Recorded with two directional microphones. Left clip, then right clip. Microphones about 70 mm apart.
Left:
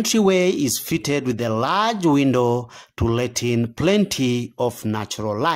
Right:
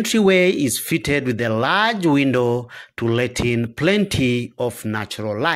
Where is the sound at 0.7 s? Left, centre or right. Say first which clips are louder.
Right 2 dB; left.